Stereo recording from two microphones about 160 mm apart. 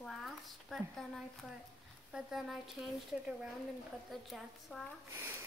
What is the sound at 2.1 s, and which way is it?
Speech, centre (ahead or behind).